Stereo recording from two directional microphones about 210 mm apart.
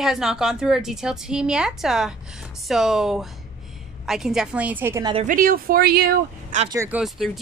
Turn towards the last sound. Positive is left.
turn(degrees=0)  # may be behind; listen again after turning